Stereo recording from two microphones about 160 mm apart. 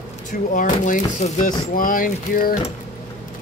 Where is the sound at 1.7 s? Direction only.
60° left (ahead or behind).